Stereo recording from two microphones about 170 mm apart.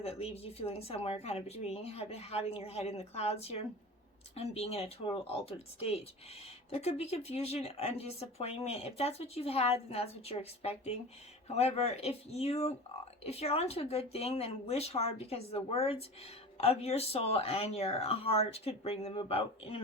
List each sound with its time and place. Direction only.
0.0 s speech: 35° left (ahead or behind)